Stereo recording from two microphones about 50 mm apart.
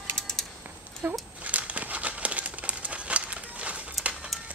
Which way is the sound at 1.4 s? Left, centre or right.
Right.